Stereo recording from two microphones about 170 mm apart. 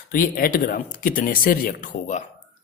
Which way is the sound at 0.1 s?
60° left (ahead or behind).